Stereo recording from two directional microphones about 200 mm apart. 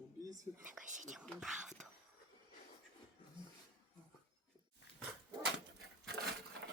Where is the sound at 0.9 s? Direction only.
40° right (ahead or behind).